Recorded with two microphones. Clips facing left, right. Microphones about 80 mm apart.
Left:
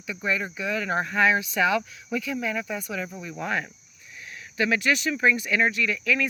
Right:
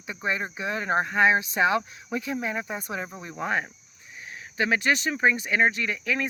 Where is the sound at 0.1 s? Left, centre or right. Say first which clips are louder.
Left 1 dB; right.